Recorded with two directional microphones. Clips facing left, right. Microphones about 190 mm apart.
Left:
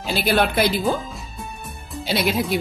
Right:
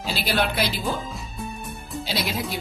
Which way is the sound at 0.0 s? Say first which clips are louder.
Left 5 dB; 55° left (ahead or behind).